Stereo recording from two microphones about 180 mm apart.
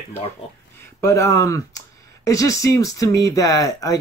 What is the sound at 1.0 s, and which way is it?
Speech, 15° left (ahead or behind).